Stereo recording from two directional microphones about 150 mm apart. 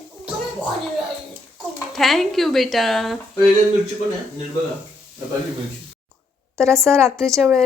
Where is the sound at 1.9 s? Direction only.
Centre (ahead or behind).